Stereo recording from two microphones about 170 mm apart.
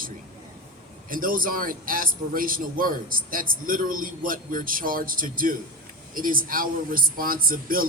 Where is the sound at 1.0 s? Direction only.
55° right (ahead or behind).